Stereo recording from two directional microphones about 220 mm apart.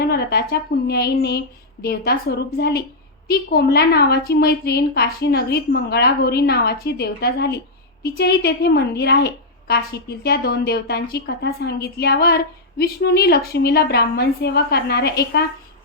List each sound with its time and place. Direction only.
0.1 s a woman's voice: 45° left (ahead or behind)